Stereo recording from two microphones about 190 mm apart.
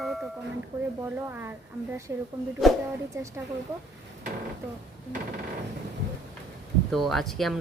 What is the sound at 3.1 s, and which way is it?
Speech, 15° right (ahead or behind).